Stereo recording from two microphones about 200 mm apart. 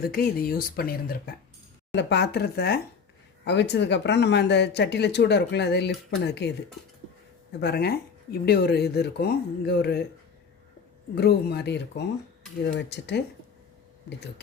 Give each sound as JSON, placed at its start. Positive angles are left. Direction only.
{"t": 0.0, "sound": "speech", "side_deg": 50}
{"t": 1.9, "sound": "speech", "side_deg": 60}
{"t": 7.6, "sound": "speech", "side_deg": 55}
{"t": 11.1, "sound": "speech", "side_deg": 55}